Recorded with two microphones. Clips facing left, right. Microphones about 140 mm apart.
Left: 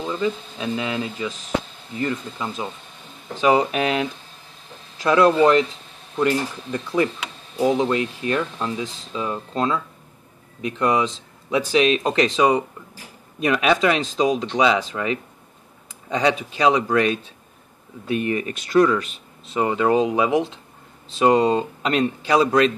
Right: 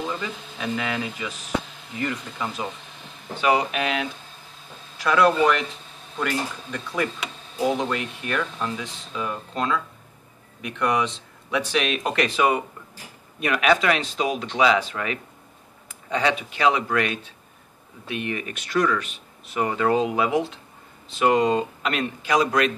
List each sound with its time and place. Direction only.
0.1 s speech: 30° left (ahead or behind)
16.2 s speech: 25° left (ahead or behind)
21.1 s speech: 30° left (ahead or behind)